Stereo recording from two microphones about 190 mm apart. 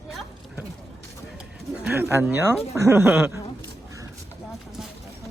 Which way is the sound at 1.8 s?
10° right (ahead or behind).